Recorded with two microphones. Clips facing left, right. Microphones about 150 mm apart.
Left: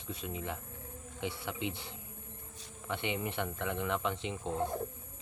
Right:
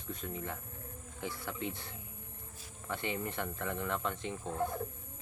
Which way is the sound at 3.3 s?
5° left (ahead or behind).